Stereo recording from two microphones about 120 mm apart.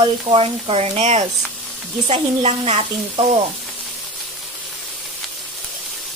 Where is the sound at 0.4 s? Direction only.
60° right (ahead or behind).